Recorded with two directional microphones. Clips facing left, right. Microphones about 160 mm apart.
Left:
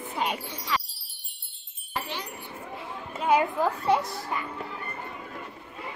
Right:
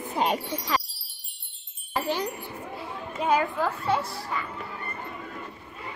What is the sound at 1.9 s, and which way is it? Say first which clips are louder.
Wind chime: right 6 dB; 40° right (ahead or behind).